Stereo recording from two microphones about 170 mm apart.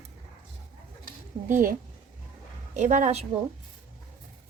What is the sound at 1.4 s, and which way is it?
Speech, 50° right (ahead or behind).